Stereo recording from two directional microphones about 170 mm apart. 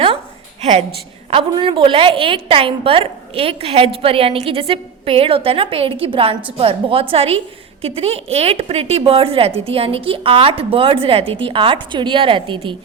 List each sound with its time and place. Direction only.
0.6 s a woman's voice: 40° right (ahead or behind)
1.3 s a woman's voice: 30° right (ahead or behind)